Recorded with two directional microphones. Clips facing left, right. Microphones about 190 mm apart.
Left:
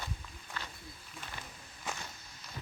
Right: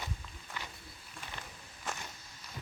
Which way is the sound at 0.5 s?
15° right (ahead or behind).